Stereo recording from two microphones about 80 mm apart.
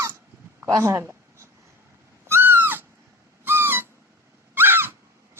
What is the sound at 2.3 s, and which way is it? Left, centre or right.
Owl, right.